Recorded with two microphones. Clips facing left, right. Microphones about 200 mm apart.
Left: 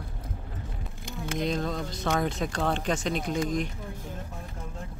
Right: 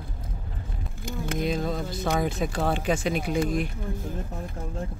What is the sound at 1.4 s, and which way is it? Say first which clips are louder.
Speech: right 1 dB; 5° right (ahead or behind).